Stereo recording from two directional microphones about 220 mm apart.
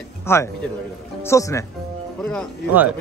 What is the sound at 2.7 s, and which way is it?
Speech, 5° right (ahead or behind).